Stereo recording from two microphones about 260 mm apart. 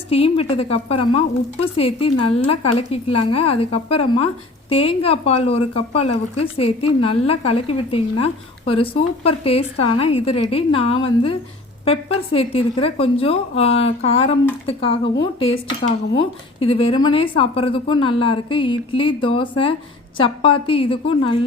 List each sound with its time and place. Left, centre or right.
0.1 s speech: left
6.0 s speech: left
7.0 s speech: left
10.2 s a woman's voice: left
10.5 s speech: left
16.6 s speech: left